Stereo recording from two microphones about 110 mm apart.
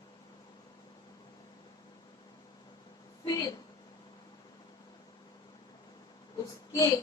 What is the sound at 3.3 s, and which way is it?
Speech, 35° left (ahead or behind).